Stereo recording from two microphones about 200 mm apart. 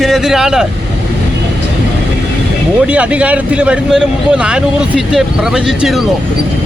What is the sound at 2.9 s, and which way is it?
Speech, 5° right (ahead or behind).